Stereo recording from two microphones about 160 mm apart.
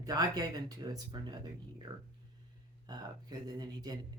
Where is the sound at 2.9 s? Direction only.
25° right (ahead or behind).